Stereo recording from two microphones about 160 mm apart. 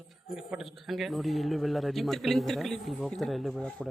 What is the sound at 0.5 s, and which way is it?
A man's voice, centre (ahead or behind).